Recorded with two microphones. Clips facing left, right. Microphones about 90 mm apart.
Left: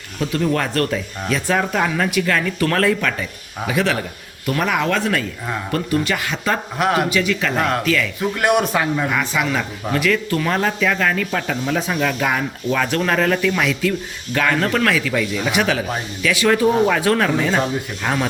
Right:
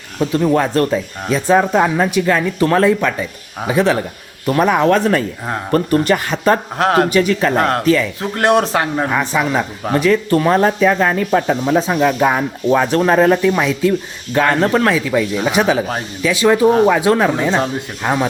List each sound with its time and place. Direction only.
0.2 s speech: 25° right (ahead or behind)